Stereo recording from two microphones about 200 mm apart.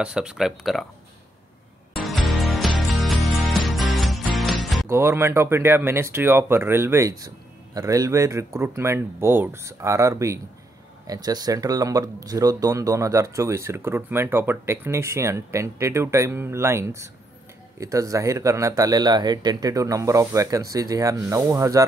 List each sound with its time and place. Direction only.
0.0 s speech: 5° right (ahead or behind)
2.2 s music: centre (ahead or behind)
4.8 s speech: 10° right (ahead or behind)